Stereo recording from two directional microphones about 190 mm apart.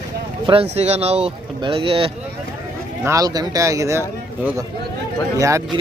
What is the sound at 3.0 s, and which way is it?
Speech, 15° right (ahead or behind).